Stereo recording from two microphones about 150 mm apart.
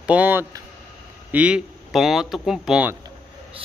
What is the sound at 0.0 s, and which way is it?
Speech, 10° right (ahead or behind).